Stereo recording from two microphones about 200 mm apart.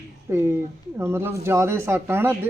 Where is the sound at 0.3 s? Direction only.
10° right (ahead or behind).